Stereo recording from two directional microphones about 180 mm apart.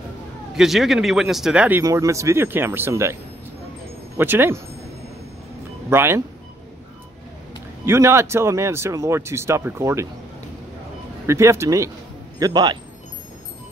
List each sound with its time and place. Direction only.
0.6 s speech: centre (ahead or behind)
4.2 s speech: 10° right (ahead or behind)
5.9 s speech: 15° right (ahead or behind)
7.8 s speech: 15° right (ahead or behind)
11.2 s a man's voice: 15° right (ahead or behind)